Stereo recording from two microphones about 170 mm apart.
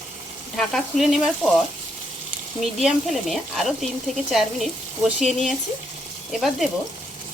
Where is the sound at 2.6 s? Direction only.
Centre (ahead or behind).